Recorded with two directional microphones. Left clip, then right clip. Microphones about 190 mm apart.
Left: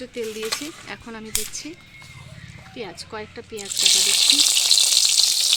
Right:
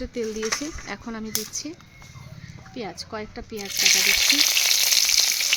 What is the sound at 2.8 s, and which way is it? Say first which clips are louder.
Speech: even; 60° right (ahead or behind).